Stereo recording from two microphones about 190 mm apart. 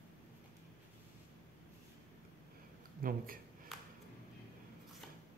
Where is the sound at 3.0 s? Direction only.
50° right (ahead or behind).